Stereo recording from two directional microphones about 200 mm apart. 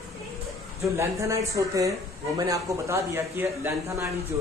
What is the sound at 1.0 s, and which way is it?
A man's voice, 15° right (ahead or behind).